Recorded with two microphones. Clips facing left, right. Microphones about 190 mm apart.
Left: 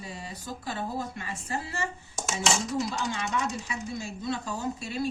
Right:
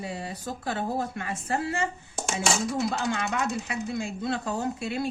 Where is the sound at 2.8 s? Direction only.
55° right (ahead or behind).